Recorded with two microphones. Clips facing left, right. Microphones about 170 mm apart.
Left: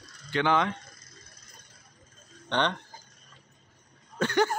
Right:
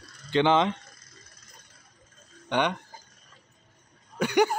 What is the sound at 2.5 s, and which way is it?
Speech, 10° right (ahead or behind).